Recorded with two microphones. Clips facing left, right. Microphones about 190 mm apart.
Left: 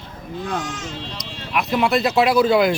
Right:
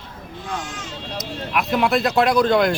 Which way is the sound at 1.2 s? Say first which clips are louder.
Right 1 dB; centre (ahead or behind).